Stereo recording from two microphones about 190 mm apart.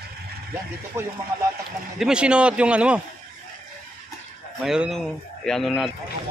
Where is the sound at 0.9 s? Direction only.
15° right (ahead or behind).